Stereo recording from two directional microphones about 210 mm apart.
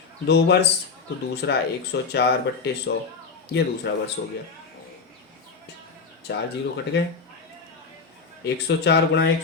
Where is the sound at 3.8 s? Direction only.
55° left (ahead or behind).